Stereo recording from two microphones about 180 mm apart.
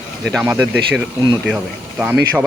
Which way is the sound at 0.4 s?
10° right (ahead or behind).